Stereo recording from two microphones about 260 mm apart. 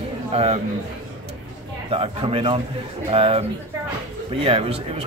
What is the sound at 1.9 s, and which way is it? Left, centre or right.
A man's voice, right.